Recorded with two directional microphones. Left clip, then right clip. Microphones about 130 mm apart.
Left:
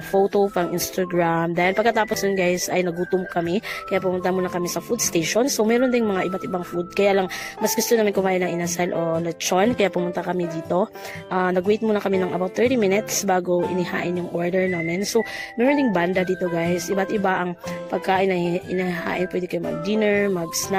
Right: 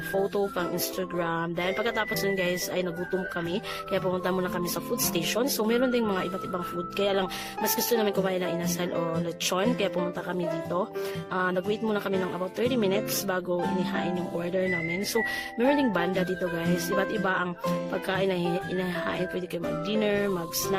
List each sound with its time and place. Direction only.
0.3 s speech: 45° left (ahead or behind)
11.3 s speech: 50° left (ahead or behind)